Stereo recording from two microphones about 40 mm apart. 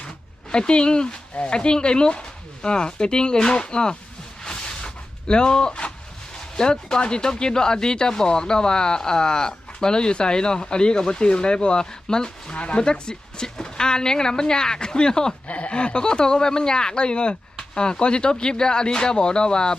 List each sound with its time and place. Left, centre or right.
0.5 s speech: left
4.4 s a sound: centre
5.3 s speech: left
15.4 s speech: left